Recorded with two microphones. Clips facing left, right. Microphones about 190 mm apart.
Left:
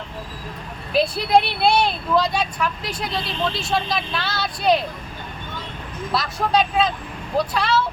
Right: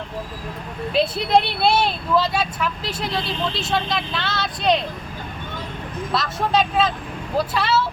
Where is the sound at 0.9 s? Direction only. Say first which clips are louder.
Left 1 dB; centre (ahead or behind).